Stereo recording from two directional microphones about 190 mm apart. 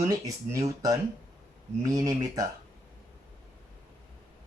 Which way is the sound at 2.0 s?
20° right (ahead or behind).